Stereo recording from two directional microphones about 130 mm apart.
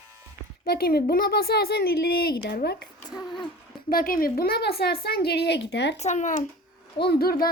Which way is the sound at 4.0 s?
90° left.